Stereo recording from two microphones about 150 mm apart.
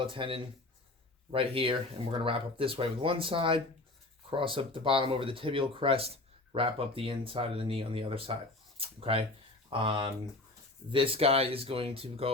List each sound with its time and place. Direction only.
0.0 s speech: 35° right (ahead or behind)